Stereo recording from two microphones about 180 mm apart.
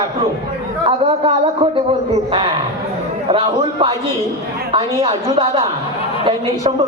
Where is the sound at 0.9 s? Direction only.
30° right (ahead or behind).